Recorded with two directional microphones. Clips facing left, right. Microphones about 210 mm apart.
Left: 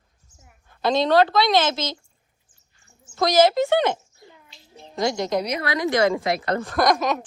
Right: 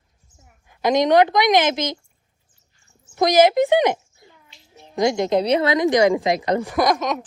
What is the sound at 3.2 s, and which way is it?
Speech, 15° right (ahead or behind).